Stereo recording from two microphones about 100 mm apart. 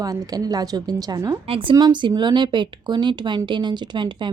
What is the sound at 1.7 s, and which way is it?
A woman's voice, 45° right (ahead or behind).